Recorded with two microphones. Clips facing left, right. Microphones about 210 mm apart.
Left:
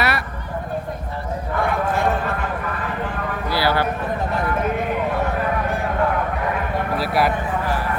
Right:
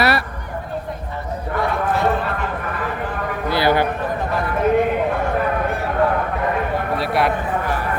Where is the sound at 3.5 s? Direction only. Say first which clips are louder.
Right 3 dB; 20° right (ahead or behind).